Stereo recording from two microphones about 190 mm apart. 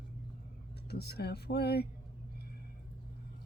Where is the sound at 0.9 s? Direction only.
60° left (ahead or behind).